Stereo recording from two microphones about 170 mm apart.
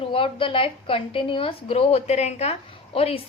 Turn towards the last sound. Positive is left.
turn(degrees=35)  # may be behind; listen again after turning